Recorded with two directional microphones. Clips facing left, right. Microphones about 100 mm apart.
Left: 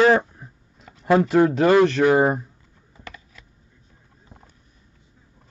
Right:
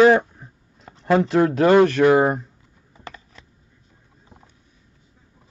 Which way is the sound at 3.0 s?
30° right (ahead or behind).